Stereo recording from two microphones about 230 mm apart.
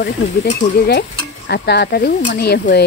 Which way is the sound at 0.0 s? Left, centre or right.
Left.